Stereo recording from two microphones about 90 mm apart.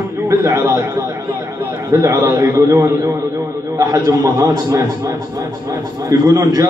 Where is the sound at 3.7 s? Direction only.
35° right (ahead or behind).